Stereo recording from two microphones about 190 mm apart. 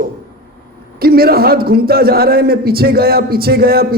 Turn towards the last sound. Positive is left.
turn(degrees=-55)  # may be behind; listen again after turning